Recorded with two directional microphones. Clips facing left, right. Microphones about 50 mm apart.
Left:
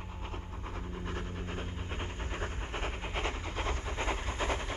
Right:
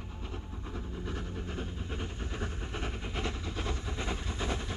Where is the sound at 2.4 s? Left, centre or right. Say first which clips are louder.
Left 1 dB; left.